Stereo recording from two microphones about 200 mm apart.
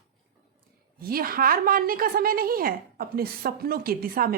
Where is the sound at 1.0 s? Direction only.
50° right (ahead or behind).